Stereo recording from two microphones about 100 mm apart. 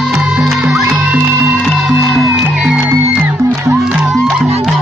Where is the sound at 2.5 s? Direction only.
15° right (ahead or behind).